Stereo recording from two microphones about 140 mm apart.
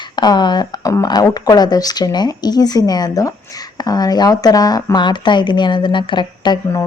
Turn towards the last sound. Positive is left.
turn(degrees=35)  # may be behind; listen again after turning